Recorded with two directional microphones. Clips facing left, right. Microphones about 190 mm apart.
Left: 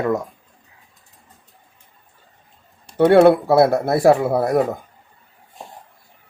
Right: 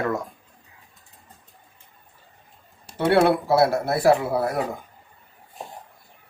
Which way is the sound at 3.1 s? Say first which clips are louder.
Left 6 dB; 50° left (ahead or behind).